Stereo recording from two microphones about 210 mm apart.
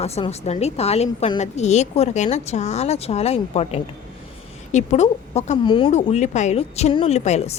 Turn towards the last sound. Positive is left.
turn(degrees=30)  # may be behind; listen again after turning